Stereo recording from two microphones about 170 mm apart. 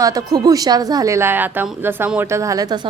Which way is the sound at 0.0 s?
20° right (ahead or behind).